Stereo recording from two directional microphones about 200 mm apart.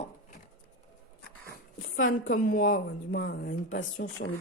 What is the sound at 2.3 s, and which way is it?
Speech, 45° left (ahead or behind).